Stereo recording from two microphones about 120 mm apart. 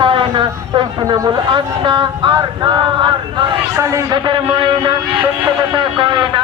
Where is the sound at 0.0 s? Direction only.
45° right (ahead or behind).